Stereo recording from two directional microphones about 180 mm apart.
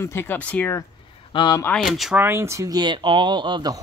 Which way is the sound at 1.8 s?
Centre (ahead or behind).